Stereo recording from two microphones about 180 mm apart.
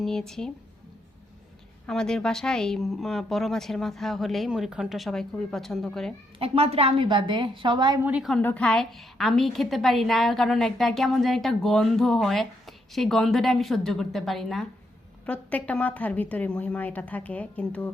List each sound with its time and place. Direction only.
0.0 s a woman's voice: centre (ahead or behind)
1.9 s a woman's voice: 5° left (ahead or behind)
6.4 s a woman's voice: 35° right (ahead or behind)
8.0 s a woman's voice: 5° right (ahead or behind)